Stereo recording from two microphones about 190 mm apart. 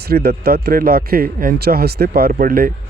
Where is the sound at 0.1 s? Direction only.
55° right (ahead or behind).